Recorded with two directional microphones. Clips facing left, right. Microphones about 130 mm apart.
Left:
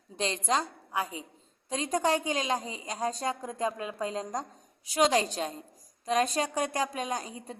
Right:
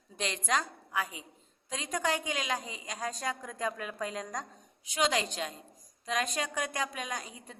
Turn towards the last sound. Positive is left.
turn(degrees=35)  # may be behind; listen again after turning